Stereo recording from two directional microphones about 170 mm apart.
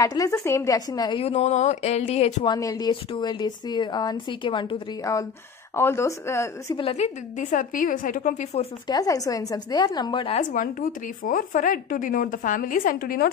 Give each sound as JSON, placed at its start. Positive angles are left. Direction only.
{"t": 0.0, "sound": "speech", "side_deg": 20}
{"t": 1.2, "sound": "speech", "side_deg": 40}
{"t": 2.5, "sound": "a woman's voice", "side_deg": 25}
{"t": 6.8, "sound": "speech", "side_deg": 40}
{"t": 8.8, "sound": "speech", "side_deg": 20}
{"t": 10.5, "sound": "speech", "side_deg": 50}